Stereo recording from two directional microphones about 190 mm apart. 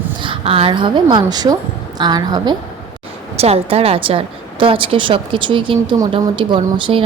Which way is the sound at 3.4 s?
30° right (ahead or behind).